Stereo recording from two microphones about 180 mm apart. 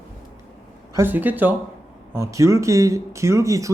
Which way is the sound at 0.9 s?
10° right (ahead or behind).